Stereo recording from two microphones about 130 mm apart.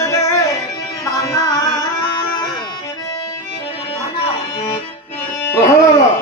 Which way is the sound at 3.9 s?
45° left (ahead or behind).